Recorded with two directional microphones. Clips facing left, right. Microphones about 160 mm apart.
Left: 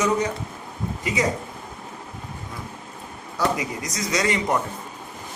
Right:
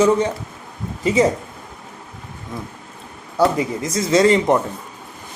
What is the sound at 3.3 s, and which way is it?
Speech, 30° right (ahead or behind).